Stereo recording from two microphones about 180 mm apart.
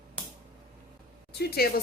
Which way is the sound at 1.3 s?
60° left (ahead or behind).